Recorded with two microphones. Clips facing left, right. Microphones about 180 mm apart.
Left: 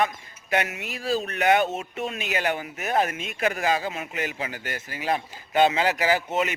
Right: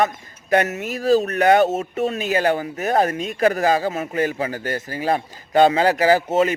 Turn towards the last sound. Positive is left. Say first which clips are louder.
# right 7 dB
turn(degrees=-40)  # may be behind; listen again after turning